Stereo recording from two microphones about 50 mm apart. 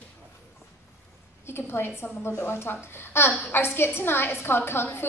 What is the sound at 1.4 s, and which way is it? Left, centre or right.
A woman's voice, left.